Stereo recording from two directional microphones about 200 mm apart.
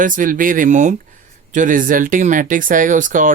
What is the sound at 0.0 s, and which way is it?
Speech, 40° right (ahead or behind).